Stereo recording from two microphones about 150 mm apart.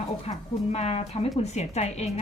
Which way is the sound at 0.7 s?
45° left (ahead or behind).